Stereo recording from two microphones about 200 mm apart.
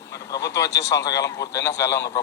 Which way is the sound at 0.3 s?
15° left (ahead or behind).